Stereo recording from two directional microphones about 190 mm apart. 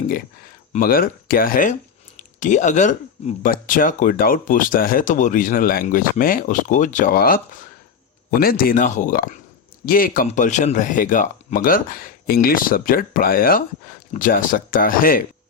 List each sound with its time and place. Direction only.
0.7 s speech: 50° left (ahead or behind)